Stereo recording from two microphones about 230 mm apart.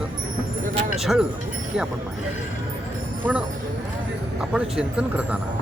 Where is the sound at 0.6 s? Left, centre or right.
Right.